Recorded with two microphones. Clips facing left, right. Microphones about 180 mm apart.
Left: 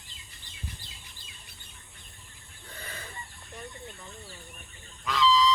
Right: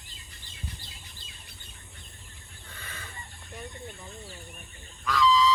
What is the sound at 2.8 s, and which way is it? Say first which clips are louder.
Chicken: left 3 dB; 35° left (ahead or behind).